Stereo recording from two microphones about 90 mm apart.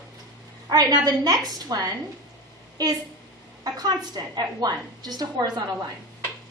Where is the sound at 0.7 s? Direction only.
45° right (ahead or behind).